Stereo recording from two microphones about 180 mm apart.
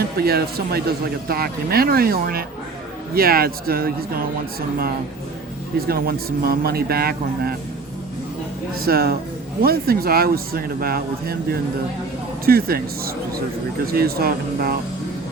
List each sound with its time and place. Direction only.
0.2 s speech: 60° right (ahead or behind)
5.9 s speech: 55° right (ahead or behind)
8.7 s speech: 55° right (ahead or behind)
12.5 s speech: 55° right (ahead or behind)